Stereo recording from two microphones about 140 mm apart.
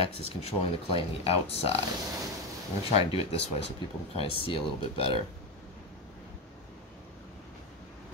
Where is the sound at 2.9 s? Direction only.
45° left (ahead or behind).